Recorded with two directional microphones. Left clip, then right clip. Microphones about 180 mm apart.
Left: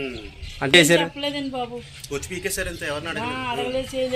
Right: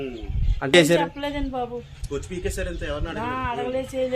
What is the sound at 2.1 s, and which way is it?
Speech, 30° right (ahead or behind).